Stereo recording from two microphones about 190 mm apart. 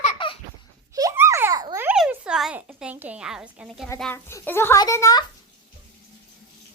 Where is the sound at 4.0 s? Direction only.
10° left (ahead or behind).